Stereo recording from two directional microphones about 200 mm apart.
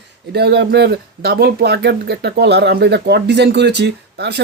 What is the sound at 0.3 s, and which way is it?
Speech, 55° right (ahead or behind).